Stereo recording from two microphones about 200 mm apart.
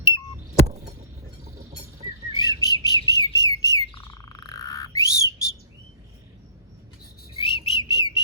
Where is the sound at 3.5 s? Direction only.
15° left (ahead or behind).